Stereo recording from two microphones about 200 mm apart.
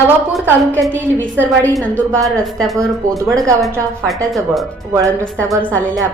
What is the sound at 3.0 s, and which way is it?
Speech, 15° right (ahead or behind).